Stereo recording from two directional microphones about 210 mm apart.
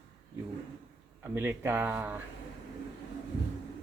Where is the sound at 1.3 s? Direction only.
10° right (ahead or behind).